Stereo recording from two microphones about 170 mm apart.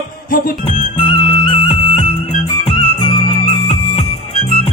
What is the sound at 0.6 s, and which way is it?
Music, 30° left (ahead or behind).